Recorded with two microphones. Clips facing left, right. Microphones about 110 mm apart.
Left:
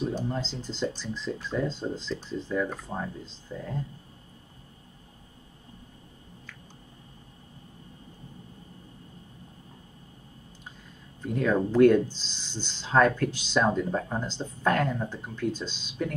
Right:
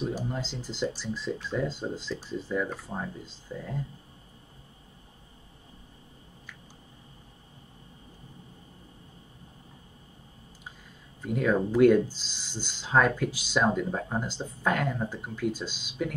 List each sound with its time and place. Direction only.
0.1 s speech: 10° right (ahead or behind)
11.2 s speech: 10° right (ahead or behind)